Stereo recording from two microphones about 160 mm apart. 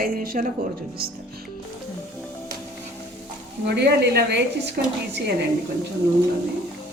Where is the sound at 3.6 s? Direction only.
90° right.